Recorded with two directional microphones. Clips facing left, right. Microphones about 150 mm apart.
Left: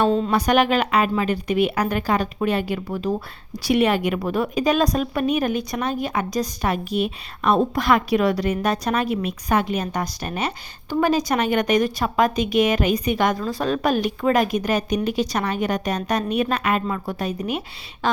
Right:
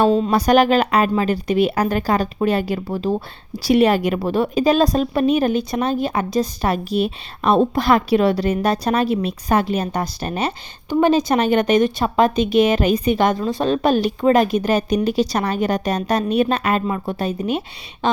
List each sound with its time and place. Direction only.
0.0 s a woman's voice: 35° right (ahead or behind)